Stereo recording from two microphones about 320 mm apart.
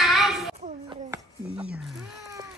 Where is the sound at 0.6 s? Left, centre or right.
Centre.